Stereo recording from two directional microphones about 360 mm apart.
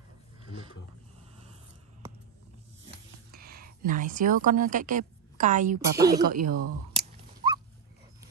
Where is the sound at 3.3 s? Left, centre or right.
Right.